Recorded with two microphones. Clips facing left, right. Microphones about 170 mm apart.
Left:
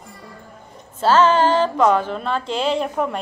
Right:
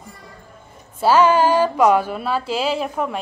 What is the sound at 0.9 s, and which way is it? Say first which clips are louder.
Speech: right 1 dB; 10° right (ahead or behind).